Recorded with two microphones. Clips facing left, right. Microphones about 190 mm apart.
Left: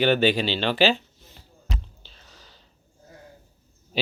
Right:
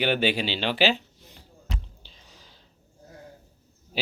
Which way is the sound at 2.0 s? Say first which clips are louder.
Left 1 dB; 10° right (ahead or behind).